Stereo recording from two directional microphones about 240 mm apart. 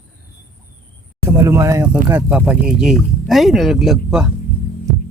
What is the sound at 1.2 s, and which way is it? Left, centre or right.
Speech, centre.